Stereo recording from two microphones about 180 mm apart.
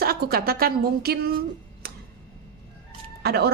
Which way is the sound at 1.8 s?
60° right (ahead or behind).